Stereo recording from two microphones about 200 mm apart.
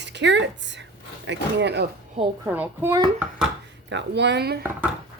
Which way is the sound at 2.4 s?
10° right (ahead or behind).